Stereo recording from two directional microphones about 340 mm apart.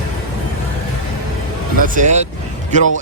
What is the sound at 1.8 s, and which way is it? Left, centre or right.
Speech, right.